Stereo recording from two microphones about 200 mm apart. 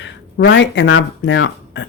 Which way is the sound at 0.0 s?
65° left (ahead or behind).